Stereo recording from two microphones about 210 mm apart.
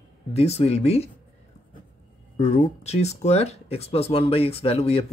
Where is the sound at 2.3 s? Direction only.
30° left (ahead or behind).